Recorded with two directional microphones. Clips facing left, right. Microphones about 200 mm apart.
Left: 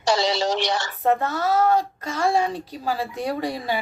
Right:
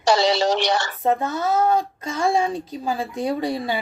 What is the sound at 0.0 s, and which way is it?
Speech, 65° right (ahead or behind).